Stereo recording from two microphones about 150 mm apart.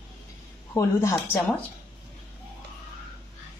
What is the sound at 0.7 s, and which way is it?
Speech, 20° left (ahead or behind).